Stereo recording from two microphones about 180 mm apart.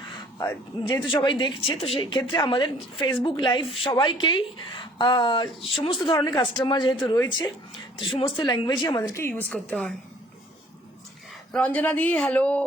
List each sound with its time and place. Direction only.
0.1 s speech: 15° left (ahead or behind)
1.1 s speech: 25° left (ahead or behind); by 9.9 s 5° left (ahead or behind)
11.5 s a man's voice: 10° left (ahead or behind)